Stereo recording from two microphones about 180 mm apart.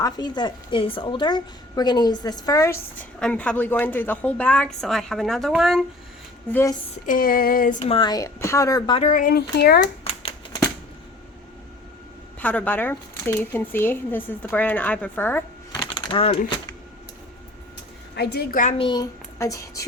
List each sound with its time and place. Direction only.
0.0 s a woman's voice: 25° left (ahead or behind); by 5.8 s centre (ahead or behind)
6.5 s a woman's voice: 15° left (ahead or behind)
7.1 s female singing: 50° left (ahead or behind)
7.8 s speech: 30° left (ahead or behind)
9.0 s speech: 45° left (ahead or behind); by 9.8 s 60° left (ahead or behind)
10.2 s shuffling cards: 25° left (ahead or behind)
12.4 s a woman's voice: 10° left (ahead or behind)
16.0 s speech: 30° left (ahead or behind)
18.1 s speech: 65° left (ahead or behind)
18.8 s speech: 25° left (ahead or behind)